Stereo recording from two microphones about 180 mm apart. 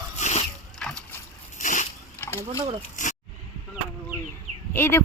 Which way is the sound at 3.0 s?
45° left (ahead or behind).